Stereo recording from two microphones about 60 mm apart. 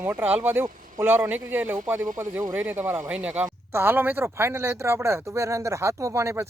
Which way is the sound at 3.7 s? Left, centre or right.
Right.